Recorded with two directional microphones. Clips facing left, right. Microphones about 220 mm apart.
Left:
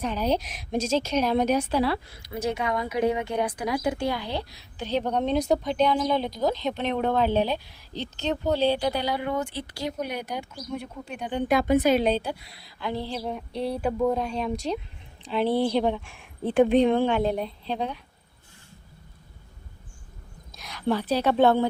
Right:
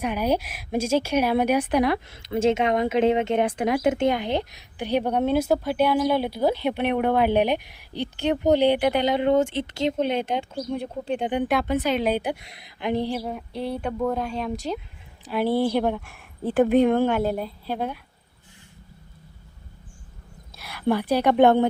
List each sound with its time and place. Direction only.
0.0 s a woman's voice: 10° right (ahead or behind); by 11.3 s 30° right (ahead or behind)
12.0 s a woman's voice: 15° right (ahead or behind)
13.2 s a woman's voice: centre (ahead or behind)
15.4 s speech: 15° left (ahead or behind)
15.7 s a woman's voice: 10° right (ahead or behind)
20.6 s a woman's voice: 10° right (ahead or behind)